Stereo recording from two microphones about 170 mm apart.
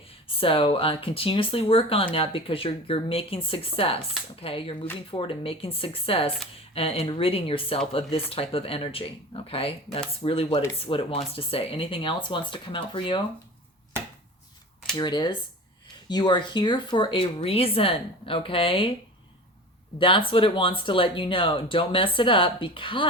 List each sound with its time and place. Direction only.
0.3 s speech: 30° left (ahead or behind)
14.9 s speech: 25° left (ahead or behind)
20.0 s speech: 30° left (ahead or behind)